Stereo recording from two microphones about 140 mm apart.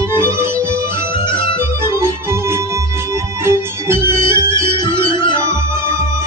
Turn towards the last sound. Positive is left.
turn(degrees=35)  # may be behind; listen again after turning